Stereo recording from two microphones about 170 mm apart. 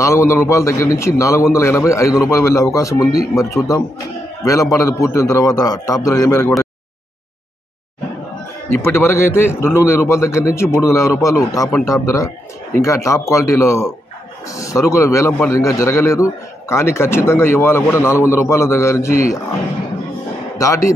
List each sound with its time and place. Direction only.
0.0 s a man's voice: 15° left (ahead or behind)
4.5 s a man's voice: 20° left (ahead or behind)
8.7 s a man's voice: 15° left (ahead or behind)
20.5 s speech: 20° left (ahead or behind)